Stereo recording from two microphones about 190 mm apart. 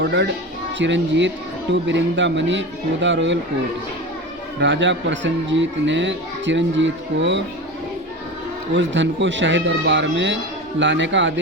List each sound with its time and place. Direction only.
0.0 s a sound: 70° right (ahead or behind)
0.8 s speech: 70° right (ahead or behind)
4.6 s speech: 75° right (ahead or behind)
8.7 s speech: 75° right (ahead or behind)